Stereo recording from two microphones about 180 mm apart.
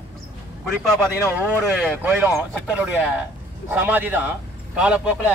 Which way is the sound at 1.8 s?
5° right (ahead or behind).